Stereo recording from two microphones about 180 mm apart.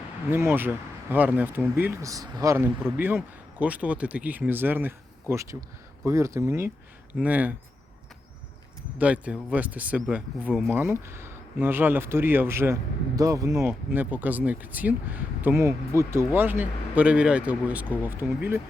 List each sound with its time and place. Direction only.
0.3 s speech: 15° right (ahead or behind)
9.0 s speech: 5° right (ahead or behind)